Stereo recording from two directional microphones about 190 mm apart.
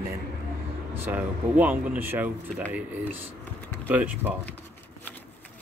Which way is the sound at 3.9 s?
10° right (ahead or behind).